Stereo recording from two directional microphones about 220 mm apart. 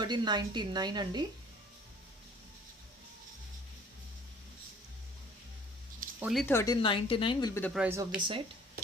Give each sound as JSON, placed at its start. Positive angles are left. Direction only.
{"t": 0.0, "sound": "a woman's voice", "side_deg": -20}
{"t": 6.1, "sound": "speech", "side_deg": -5}
{"t": 6.4, "sound": "a woman's voice", "side_deg": 10}
{"t": 7.6, "sound": "speech", "side_deg": -5}